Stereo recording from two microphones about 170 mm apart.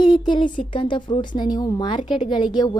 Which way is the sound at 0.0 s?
25° left (ahead or behind).